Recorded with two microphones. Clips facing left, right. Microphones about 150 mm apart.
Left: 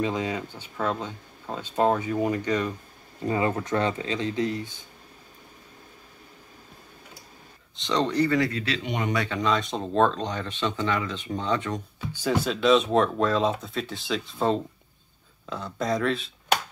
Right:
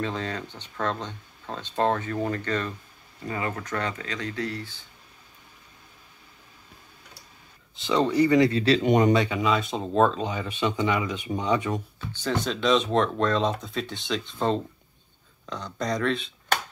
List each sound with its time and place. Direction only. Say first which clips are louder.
0.0 s speech: left 3 dB; 10° left (ahead or behind)
3.3 s speech: left 6 dB; 25° left (ahead or behind)
7.7 s speech: right 2 dB; 5° right (ahead or behind); by 9.1 s 40° right (ahead or behind)
9.1 s speech: right 5 dB; 20° right (ahead or behind)
9.4 s speech: right 1 dB; 5° right (ahead or behind)
12.1 s speech: left 2 dB; 10° left (ahead or behind)